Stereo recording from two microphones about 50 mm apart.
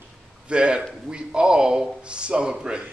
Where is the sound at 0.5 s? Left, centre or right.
Centre.